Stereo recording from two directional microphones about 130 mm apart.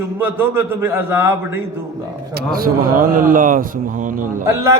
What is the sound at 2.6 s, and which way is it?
Speech, 90° right.